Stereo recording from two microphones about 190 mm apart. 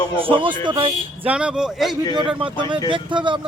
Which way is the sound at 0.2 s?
30° right (ahead or behind).